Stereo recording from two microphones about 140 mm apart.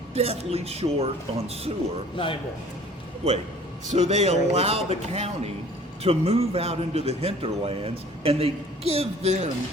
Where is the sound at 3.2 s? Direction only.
45° right (ahead or behind).